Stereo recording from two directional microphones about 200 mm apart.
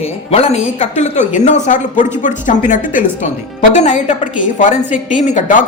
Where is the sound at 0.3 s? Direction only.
30° left (ahead or behind).